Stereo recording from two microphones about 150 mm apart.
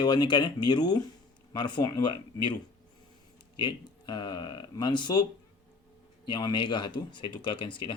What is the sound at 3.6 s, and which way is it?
Speech, 30° left (ahead or behind).